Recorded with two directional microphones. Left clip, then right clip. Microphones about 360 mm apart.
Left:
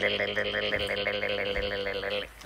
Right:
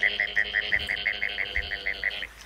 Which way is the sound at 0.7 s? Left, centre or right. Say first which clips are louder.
Right 3 dB; left.